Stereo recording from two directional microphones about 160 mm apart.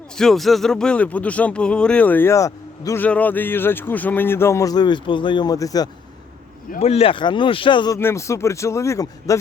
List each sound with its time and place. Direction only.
0.2 s speech: centre (ahead or behind); by 5.9 s 20° left (ahead or behind)
6.7 s speech: 40° left (ahead or behind)
7.9 s speech: 15° left (ahead or behind)